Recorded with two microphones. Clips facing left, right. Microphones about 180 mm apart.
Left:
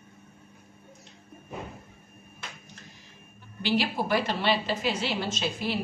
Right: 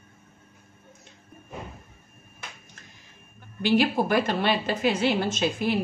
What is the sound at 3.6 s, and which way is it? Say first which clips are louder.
Speech: right 5 dB; 50° right (ahead or behind).